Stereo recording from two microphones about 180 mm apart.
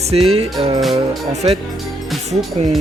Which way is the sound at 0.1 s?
35° right (ahead or behind).